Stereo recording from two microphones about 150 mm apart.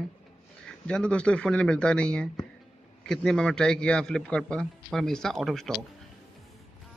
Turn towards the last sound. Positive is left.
turn(degrees=0)  # may be behind; listen again after turning